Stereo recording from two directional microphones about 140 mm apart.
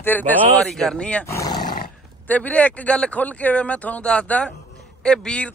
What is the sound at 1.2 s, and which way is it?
Speech, 20° left (ahead or behind).